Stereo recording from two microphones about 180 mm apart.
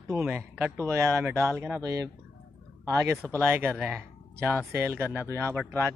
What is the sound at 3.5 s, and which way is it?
Speech, 10° right (ahead or behind).